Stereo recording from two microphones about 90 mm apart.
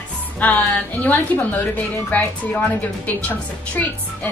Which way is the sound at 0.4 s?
20° left (ahead or behind).